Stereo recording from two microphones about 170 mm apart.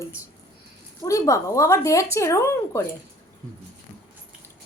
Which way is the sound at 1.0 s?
20° left (ahead or behind).